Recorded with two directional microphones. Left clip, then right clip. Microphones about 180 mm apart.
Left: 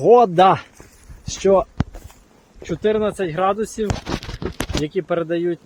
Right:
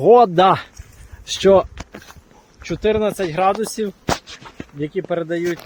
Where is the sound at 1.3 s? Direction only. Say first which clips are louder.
Right 3 dB; 50° right (ahead or behind).